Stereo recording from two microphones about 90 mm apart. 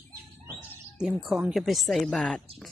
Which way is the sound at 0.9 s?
5° right (ahead or behind).